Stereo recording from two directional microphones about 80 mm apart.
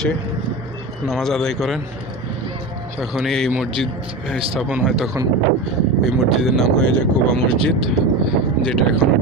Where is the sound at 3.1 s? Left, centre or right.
Centre.